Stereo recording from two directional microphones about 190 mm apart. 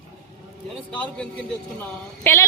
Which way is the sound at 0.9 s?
5° left (ahead or behind).